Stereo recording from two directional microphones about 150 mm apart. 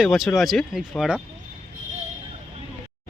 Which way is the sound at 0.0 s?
Centre (ahead or behind).